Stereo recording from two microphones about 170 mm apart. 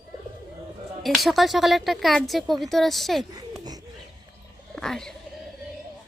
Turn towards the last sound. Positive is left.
turn(degrees=5)  # may be behind; listen again after turning